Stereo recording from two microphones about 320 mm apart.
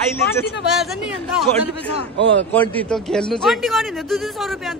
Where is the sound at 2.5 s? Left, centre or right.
Centre.